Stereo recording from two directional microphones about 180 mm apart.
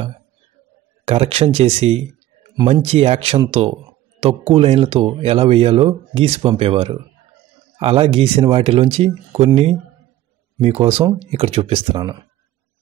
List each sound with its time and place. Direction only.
1.0 s speech: 35° right (ahead or behind)